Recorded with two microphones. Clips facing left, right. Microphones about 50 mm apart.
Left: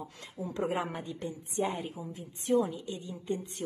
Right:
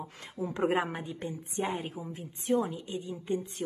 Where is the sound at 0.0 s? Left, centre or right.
Right.